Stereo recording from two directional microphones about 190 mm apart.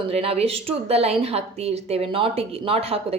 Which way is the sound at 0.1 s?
30° right (ahead or behind).